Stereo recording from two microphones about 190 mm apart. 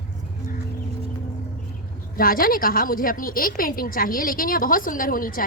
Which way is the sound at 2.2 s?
50° left (ahead or behind).